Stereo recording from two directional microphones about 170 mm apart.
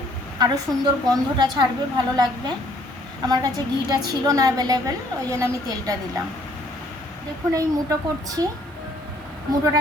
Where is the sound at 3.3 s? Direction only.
20° right (ahead or behind).